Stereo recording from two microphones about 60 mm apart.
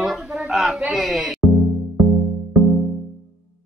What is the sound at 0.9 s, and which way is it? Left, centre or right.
Music, centre.